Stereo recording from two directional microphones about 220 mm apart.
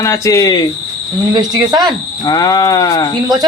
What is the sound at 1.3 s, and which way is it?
Speech, 15° right (ahead or behind).